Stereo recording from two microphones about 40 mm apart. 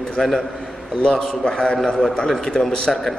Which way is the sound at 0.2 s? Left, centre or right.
Centre.